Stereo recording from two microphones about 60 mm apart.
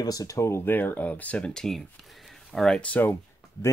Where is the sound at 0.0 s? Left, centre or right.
Left.